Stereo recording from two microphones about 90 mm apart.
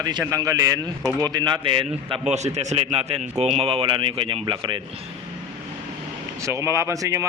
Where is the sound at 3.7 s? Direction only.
80° right; by 4.8 s 55° right (ahead or behind).